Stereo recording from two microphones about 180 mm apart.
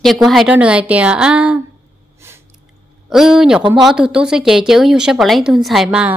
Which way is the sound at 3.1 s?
Centre (ahead or behind).